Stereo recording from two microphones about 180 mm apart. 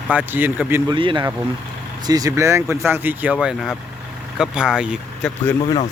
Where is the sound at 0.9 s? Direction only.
25° right (ahead or behind); by 5.3 s 5° right (ahead or behind).